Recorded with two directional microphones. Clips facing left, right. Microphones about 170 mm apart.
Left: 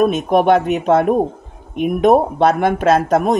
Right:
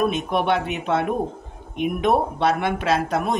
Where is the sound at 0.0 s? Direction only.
45° left (ahead or behind).